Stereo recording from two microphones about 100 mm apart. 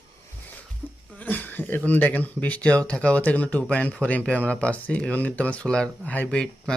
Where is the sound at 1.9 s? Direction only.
15° left (ahead or behind).